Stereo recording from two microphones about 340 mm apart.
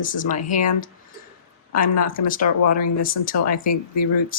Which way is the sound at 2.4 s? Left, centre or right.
Left.